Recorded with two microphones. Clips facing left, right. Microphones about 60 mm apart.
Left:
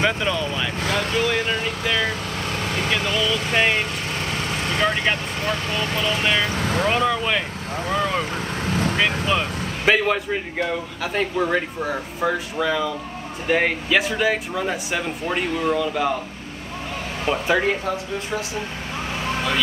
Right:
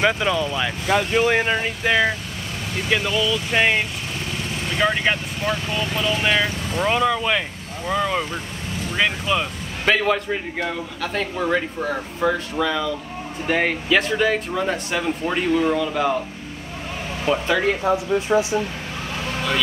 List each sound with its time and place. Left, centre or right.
0.0 s speech: centre
0.9 s speech: right
2.6 s vehicle: left
3.0 s speech: left
3.5 s speech: centre
4.3 s vehicle: left
4.7 s speech: centre
6.2 s speech: centre
6.5 s speech: left
6.8 s speech: centre
8.6 s vehicle: left
9.3 s speech: centre
17.3 s speech: centre
17.8 s speech: centre